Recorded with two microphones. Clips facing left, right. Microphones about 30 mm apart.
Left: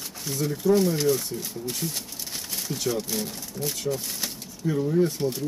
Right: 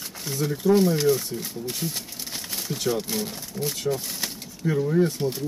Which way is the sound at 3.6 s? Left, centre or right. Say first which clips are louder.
Right 2 dB; right.